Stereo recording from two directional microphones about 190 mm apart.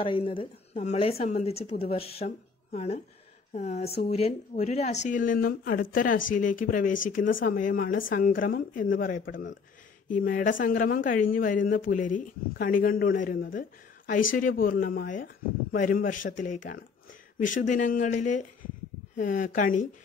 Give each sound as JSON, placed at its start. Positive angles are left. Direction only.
{"t": 0.0, "sound": "a woman's voice", "side_deg": 30}